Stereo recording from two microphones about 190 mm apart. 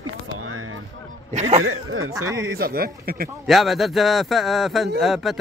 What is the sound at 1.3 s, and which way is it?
Speech, 35° right (ahead or behind).